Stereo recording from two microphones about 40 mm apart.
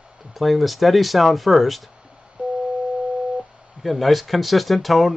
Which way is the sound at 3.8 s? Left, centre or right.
Centre.